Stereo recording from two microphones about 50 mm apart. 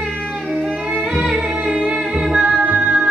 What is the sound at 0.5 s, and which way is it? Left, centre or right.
Music, centre.